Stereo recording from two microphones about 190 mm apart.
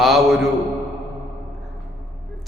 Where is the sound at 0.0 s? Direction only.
Centre (ahead or behind).